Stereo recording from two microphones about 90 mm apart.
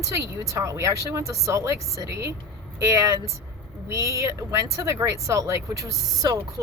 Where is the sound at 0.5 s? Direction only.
40° right (ahead or behind).